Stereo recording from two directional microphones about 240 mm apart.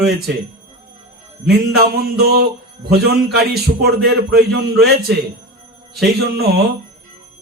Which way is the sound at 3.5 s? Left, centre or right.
Right.